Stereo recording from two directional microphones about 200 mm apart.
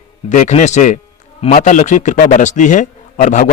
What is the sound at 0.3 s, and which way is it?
A man's voice, 35° left (ahead or behind).